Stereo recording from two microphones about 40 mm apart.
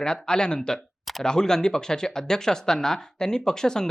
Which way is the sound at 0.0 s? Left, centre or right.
Centre.